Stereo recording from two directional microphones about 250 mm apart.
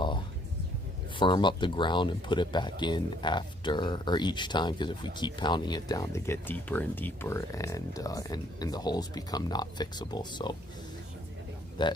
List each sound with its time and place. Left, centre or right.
1.2 s speech: centre
11.8 s speech: centre